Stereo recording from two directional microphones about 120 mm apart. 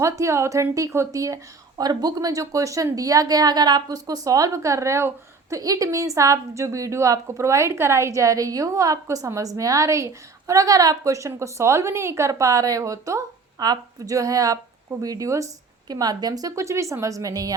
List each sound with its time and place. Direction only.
0.0 s a woman's voice: 25° right (ahead or behind)